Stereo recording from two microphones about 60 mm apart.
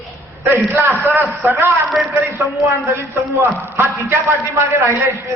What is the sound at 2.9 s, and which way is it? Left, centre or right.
Speech, right.